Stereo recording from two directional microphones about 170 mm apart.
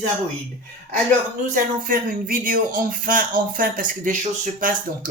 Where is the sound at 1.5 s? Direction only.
55° right (ahead or behind).